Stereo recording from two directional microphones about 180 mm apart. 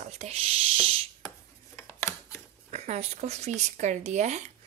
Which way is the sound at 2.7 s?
40° right (ahead or behind).